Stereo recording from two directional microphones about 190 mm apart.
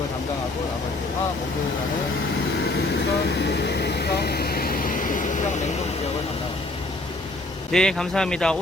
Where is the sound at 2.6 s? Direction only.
60° left (ahead or behind); by 5.4 s 45° left (ahead or behind).